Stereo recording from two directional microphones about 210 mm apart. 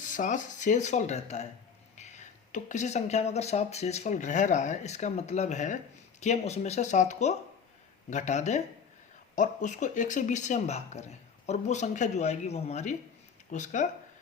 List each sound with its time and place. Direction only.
0.0 s speech: 35° left (ahead or behind)